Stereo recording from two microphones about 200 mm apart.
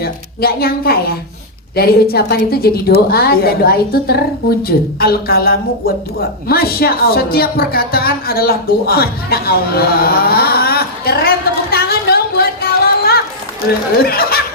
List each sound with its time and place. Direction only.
0.0 s a woman's voice: 50° left (ahead or behind)